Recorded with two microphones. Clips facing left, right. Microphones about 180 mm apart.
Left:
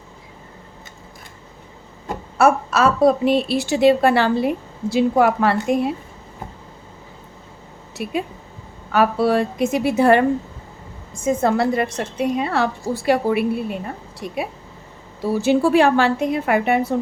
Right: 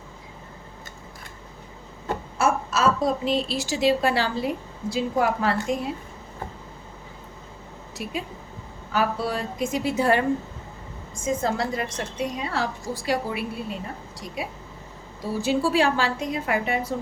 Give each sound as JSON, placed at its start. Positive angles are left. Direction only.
{"t": 2.4, "sound": "a woman's voice", "side_deg": 65}
{"t": 8.0, "sound": "a woman's voice", "side_deg": 60}
{"t": 15.2, "sound": "a woman's voice", "side_deg": 65}